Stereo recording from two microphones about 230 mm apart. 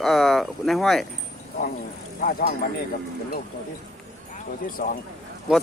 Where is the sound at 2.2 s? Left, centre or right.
Left.